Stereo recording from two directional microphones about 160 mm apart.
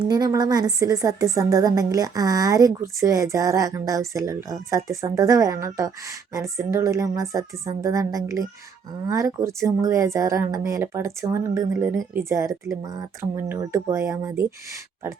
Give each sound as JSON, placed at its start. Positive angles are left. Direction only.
{"t": 0.0, "sound": "a woman's voice", "side_deg": -25}